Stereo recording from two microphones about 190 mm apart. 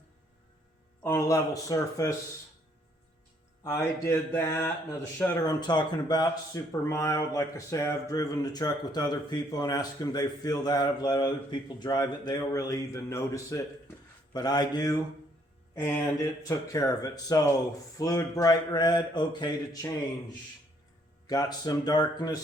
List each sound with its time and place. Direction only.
1.0 s speech: 15° left (ahead or behind)
3.6 s speech: 15° left (ahead or behind)
21.2 s speech: 20° left (ahead or behind)